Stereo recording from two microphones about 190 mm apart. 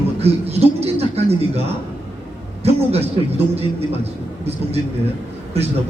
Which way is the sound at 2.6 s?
35° right (ahead or behind).